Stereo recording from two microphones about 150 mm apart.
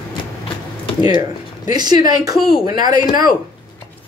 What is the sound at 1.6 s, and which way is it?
Speech, 25° right (ahead or behind).